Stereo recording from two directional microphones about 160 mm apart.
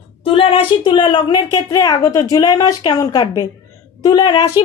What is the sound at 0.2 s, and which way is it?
A woman's voice, 35° left (ahead or behind).